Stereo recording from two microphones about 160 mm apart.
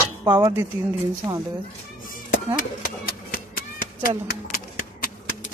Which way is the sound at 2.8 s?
65° left (ahead or behind).